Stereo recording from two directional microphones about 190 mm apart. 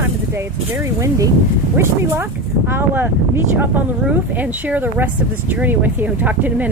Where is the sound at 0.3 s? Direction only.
15° right (ahead or behind).